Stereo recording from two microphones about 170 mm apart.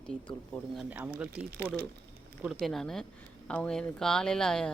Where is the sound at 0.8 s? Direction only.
10° right (ahead or behind).